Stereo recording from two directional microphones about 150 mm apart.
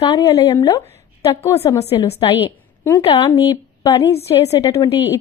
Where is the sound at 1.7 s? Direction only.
45° left (ahead or behind).